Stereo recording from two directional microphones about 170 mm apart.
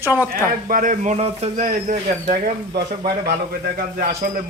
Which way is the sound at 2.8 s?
70° right (ahead or behind).